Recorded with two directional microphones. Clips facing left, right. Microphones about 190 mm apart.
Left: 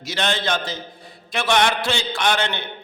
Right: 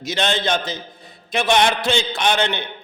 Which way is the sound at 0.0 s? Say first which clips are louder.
Right 2 dB; 20° right (ahead or behind).